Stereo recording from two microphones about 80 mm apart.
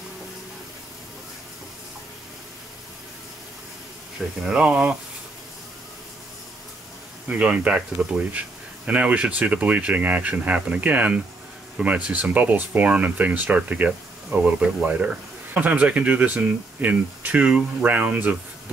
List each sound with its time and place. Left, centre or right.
4.5 s speech: centre
7.2 s speech: centre